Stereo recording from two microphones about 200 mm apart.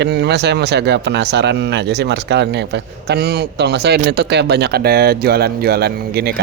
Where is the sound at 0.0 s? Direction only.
55° right (ahead or behind).